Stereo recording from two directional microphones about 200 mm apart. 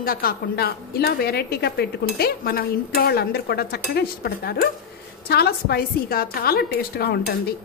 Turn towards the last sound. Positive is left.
turn(degrees=50)  # may be behind; listen again after turning